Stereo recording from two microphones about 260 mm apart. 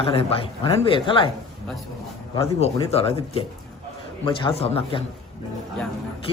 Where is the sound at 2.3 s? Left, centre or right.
Centre.